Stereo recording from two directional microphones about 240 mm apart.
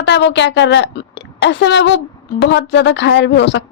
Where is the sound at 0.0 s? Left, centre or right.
Left.